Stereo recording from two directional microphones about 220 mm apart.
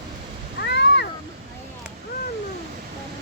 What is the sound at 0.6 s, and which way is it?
Cat, 50° left (ahead or behind).